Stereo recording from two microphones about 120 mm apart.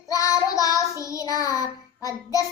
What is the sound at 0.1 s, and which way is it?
Child singing, 30° left (ahead or behind).